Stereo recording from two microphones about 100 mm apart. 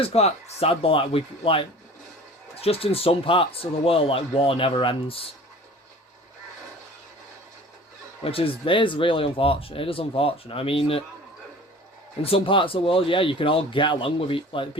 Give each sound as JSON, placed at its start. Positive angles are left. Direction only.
{"t": 0.0, "sound": "speech", "side_deg": 85}
{"t": 8.2, "sound": "speech", "side_deg": 70}
{"t": 12.2, "sound": "speech", "side_deg": 65}